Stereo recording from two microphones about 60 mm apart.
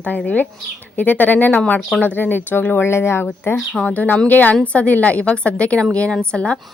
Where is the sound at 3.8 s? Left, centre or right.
Left.